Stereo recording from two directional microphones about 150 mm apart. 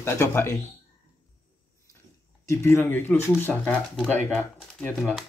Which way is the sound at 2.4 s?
15° left (ahead or behind).